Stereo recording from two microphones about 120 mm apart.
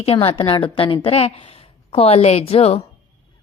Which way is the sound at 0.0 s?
55° left (ahead or behind).